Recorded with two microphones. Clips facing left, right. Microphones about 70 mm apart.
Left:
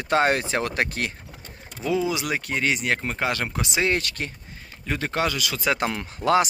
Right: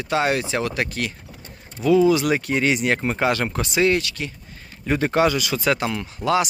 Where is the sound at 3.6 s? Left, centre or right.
Left.